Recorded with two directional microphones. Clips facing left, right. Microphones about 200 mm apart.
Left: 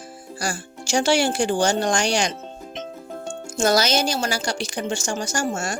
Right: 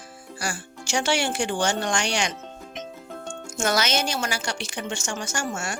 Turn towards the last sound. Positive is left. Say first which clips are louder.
# left 5 dB
turn(degrees=40)  # may be behind; listen again after turning